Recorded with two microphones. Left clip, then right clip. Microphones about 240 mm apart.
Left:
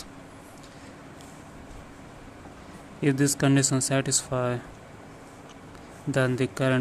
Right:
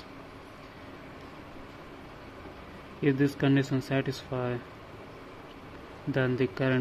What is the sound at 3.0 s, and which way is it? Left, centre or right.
Speech, left.